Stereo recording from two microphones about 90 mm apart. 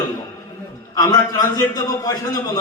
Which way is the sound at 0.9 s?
45° left (ahead or behind).